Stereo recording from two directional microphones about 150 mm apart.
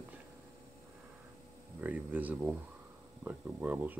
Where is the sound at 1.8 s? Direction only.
10° right (ahead or behind).